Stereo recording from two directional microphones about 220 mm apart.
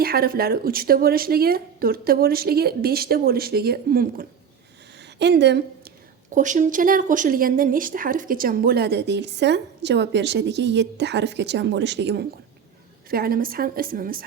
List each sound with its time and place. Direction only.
0.0 s speech: 45° right (ahead or behind)
4.9 s a sound: 50° right (ahead or behind)
6.3 s a woman's voice: 35° right (ahead or behind)